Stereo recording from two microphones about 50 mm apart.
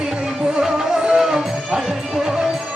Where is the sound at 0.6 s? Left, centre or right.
Centre.